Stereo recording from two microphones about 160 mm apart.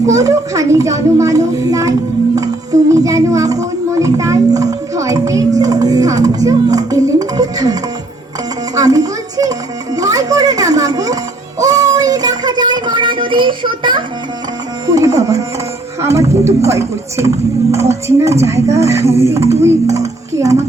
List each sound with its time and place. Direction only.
0.0 s a woman's voice: 20° right (ahead or behind)
11.6 s child singing: 20° right (ahead or behind)
14.8 s a woman's voice: 20° right (ahead or behind)